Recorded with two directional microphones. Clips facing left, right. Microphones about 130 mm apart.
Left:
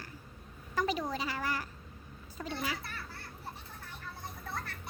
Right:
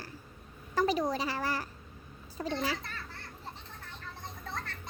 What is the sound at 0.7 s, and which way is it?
Speech, 35° right (ahead or behind).